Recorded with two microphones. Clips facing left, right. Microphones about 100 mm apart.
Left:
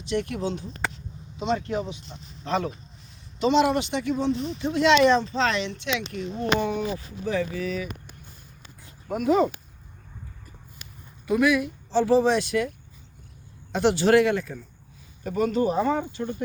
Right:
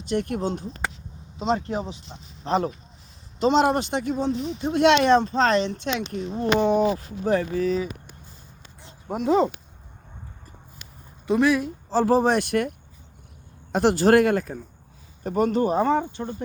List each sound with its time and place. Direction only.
0.1 s speech: 45° right (ahead or behind)
1.5 s speech: 35° right (ahead or behind)
7.3 s speech: 40° right (ahead or behind)
8.8 s a sound: 25° right (ahead or behind)
11.3 s speech: 30° right (ahead or behind); by 12.6 s 55° right (ahead or behind)
13.7 s speech: 45° right (ahead or behind)